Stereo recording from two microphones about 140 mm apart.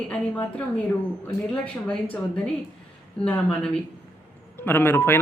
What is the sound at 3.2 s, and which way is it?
Speech, 5° left (ahead or behind).